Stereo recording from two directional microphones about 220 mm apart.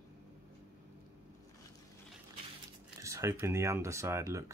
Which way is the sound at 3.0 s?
15° right (ahead or behind).